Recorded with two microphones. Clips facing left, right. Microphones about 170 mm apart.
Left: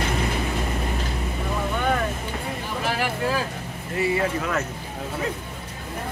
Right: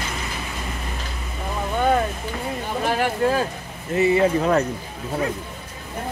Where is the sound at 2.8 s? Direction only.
45° right (ahead or behind).